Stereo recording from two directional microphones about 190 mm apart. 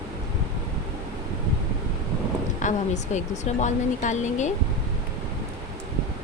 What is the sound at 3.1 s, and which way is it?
Speech, 40° left (ahead or behind).